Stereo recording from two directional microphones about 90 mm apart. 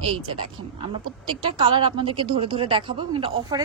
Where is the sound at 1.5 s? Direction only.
65° right (ahead or behind).